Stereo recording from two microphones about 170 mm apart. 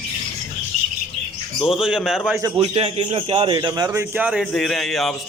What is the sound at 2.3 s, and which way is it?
Speech, 15° right (ahead or behind).